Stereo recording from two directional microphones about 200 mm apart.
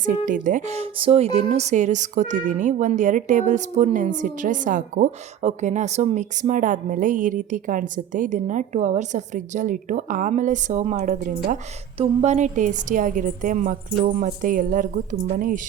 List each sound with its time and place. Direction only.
0.3 s speech: 40° right (ahead or behind)